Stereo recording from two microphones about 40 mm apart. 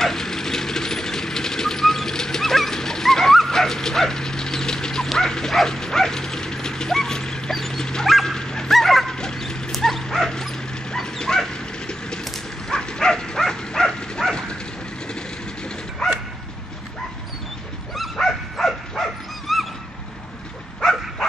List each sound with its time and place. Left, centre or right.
0.0 s a sound: centre
5.3 s bow-wow: centre
8.1 s dog: centre
8.7 s dog: centre
9.1 s dog: centre
18.1 s dog: centre
18.7 s dog: centre
20.8 s bow-wow: centre